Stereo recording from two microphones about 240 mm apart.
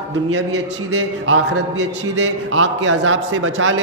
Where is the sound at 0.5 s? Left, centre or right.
Right.